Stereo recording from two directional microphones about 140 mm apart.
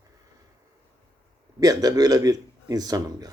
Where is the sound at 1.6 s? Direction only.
25° right (ahead or behind).